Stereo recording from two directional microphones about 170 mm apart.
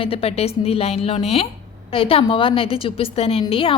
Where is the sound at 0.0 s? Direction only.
35° left (ahead or behind).